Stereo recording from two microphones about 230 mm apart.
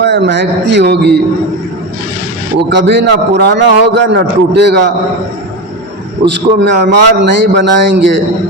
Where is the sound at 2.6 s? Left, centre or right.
Right.